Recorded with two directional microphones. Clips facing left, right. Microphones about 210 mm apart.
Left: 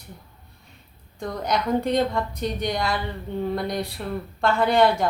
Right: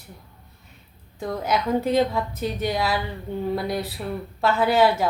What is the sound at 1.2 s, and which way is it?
A woman's voice, 5° right (ahead or behind).